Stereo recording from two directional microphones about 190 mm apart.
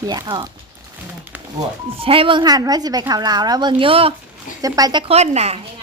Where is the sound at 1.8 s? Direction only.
30° right (ahead or behind).